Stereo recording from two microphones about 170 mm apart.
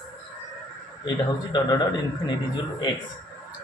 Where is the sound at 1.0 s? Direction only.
25° left (ahead or behind).